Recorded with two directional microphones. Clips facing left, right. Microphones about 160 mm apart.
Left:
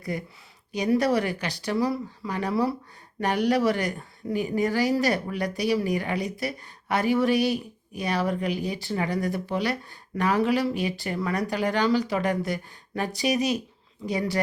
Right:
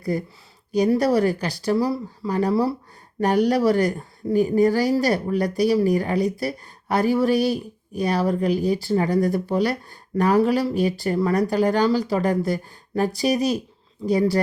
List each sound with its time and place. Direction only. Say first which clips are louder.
0.0 s speech: right 7 dB; 35° right (ahead or behind)